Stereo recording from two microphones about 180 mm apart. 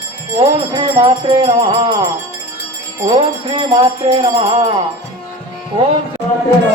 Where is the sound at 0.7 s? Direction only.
25° right (ahead or behind).